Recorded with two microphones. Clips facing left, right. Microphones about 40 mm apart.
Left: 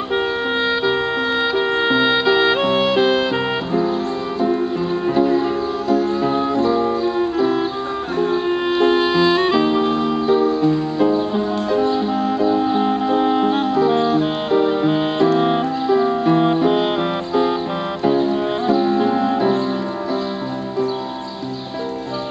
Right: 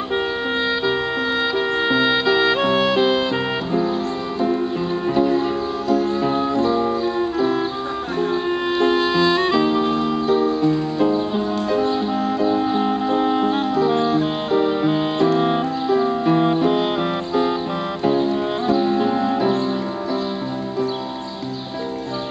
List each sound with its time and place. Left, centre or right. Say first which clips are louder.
1.5 s music: left 2 dB; centre
4.4 s music: left 2 dB; centre